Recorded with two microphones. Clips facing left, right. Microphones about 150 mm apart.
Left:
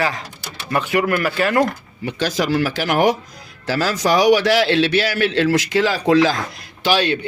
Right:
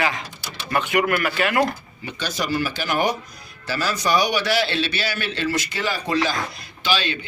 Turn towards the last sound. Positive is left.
turn(degrees=65)  # may be behind; listen again after turning